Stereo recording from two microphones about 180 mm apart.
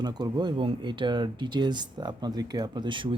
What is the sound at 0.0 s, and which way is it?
Speech, 20° right (ahead or behind).